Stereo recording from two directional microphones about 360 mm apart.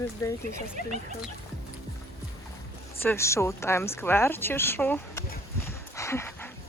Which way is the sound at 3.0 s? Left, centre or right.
Centre.